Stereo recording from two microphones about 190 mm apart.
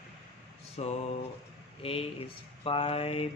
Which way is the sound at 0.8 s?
35° left (ahead or behind).